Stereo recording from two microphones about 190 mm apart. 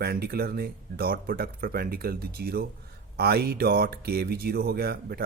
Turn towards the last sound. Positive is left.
turn(degrees=-55)  # may be behind; listen again after turning